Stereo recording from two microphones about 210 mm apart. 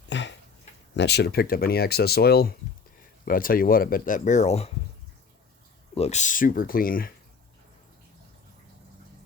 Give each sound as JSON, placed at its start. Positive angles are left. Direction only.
{"t": 0.1, "sound": "a sound", "side_deg": 60}
{"t": 0.9, "sound": "speech", "side_deg": 50}
{"t": 5.9, "sound": "speech", "side_deg": 30}